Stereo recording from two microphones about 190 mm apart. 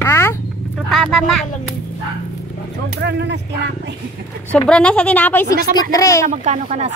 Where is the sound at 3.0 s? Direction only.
65° right (ahead or behind).